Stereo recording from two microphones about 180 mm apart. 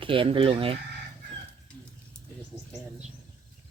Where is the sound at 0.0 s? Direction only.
30° right (ahead or behind).